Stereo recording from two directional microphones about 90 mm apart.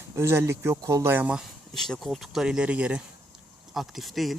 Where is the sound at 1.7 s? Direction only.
5° left (ahead or behind); by 3.0 s 15° right (ahead or behind).